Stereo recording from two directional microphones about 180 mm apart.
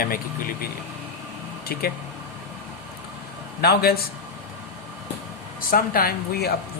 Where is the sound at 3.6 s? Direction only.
60° left (ahead or behind).